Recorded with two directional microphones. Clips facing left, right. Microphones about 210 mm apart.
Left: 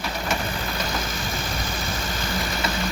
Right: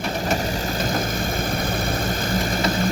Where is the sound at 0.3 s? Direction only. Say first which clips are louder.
Right 4 dB; 40° right (ahead or behind).